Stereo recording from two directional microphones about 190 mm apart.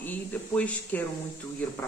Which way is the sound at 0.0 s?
10° left (ahead or behind).